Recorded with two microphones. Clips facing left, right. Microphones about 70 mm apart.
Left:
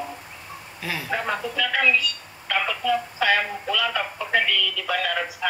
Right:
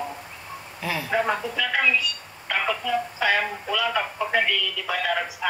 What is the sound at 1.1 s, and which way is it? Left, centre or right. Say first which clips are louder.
Speech: right 3 dB; right.